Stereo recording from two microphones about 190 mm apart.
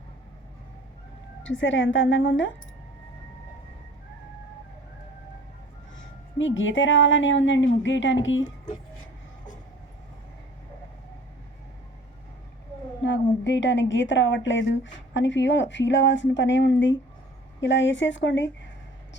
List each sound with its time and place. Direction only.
1.5 s a woman's voice: 80° left
6.0 s a woman's voice: 90° left
13.0 s a woman's voice: 70° left (ahead or behind)